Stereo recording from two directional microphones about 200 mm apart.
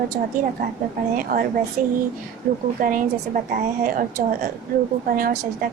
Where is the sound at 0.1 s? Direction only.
45° right (ahead or behind).